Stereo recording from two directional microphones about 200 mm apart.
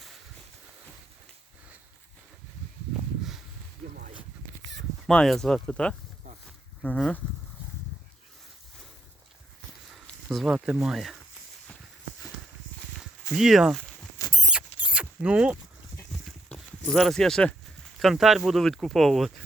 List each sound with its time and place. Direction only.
5.0 s speech: centre (ahead or behind)
9.9 s speech: centre (ahead or behind)
13.3 s speech: centre (ahead or behind)
14.2 s rodents: 15° left (ahead or behind)
14.9 s zipper: 5° right (ahead or behind)
16.2 s a sound: centre (ahead or behind)
18.0 s speech: centre (ahead or behind)